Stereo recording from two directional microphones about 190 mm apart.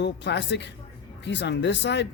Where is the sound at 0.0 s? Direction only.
65° left (ahead or behind).